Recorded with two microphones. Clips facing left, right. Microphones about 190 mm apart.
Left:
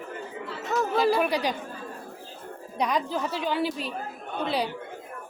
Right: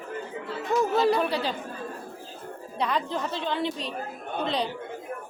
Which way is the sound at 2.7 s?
15° left (ahead or behind).